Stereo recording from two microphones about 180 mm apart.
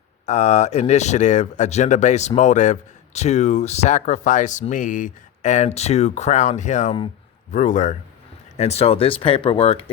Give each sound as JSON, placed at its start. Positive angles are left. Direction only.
{"t": 0.3, "sound": "speech", "side_deg": 40}